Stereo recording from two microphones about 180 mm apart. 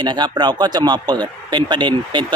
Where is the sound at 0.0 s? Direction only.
25° right (ahead or behind).